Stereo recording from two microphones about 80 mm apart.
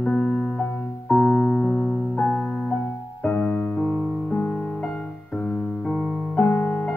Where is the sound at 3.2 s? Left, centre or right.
Centre.